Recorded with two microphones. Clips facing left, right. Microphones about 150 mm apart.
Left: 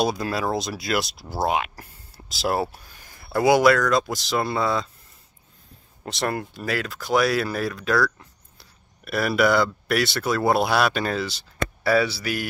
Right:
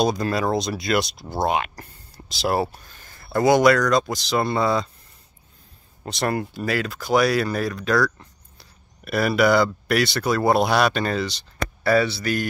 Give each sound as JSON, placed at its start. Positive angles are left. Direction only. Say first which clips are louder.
{"t": 0.0, "sound": "speech", "louder": "right 2 dB", "side_deg": 5}
{"t": 6.0, "sound": "speech", "louder": "right 2 dB", "side_deg": 0}